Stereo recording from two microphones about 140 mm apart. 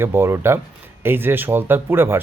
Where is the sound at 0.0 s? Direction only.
15° right (ahead or behind).